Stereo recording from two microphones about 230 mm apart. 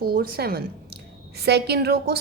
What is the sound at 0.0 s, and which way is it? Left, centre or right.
A woman's voice, right.